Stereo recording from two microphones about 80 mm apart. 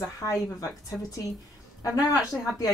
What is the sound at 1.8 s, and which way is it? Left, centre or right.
Speech, left.